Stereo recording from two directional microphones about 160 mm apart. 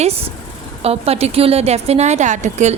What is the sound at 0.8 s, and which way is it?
A woman's voice, 40° right (ahead or behind).